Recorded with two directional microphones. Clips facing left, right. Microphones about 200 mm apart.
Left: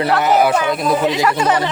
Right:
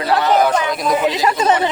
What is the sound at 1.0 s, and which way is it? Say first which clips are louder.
Speech: even; 20° right (ahead or behind).